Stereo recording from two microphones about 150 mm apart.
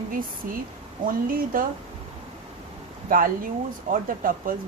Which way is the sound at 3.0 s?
70° right (ahead or behind).